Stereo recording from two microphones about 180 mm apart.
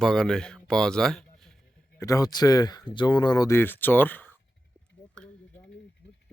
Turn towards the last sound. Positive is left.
turn(degrees=5)  # may be behind; listen again after turning